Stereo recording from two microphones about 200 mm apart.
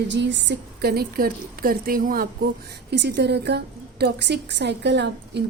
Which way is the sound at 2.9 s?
60° right (ahead or behind).